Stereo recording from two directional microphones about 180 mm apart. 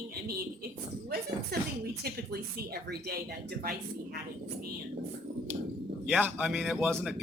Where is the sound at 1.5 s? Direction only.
60° right (ahead or behind).